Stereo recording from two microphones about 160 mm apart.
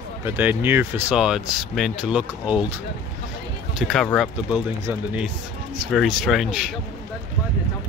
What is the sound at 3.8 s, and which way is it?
Speech, centre (ahead or behind).